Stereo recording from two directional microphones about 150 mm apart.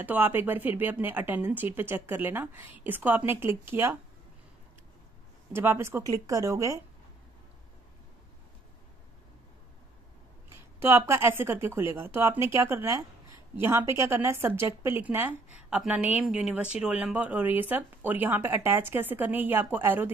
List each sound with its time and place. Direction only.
0.0 s speech: 10° right (ahead or behind)
5.5 s speech: 15° right (ahead or behind)
10.8 s speech: 15° right (ahead or behind)